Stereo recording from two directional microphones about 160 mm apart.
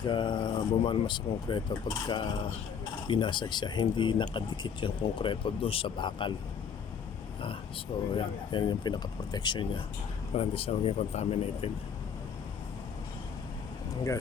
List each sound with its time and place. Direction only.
0.0 s speech: 30° left (ahead or behind)
8.1 s speech: 30° left (ahead or behind)